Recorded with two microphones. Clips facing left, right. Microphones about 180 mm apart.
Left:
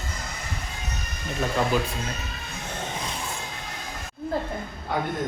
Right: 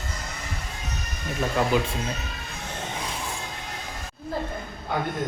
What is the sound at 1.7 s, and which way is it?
Speech, 20° right (ahead or behind).